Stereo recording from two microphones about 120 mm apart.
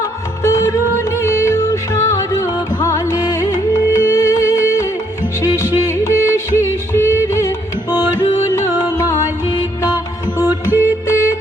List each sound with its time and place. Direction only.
0.4 s music: 30° left (ahead or behind)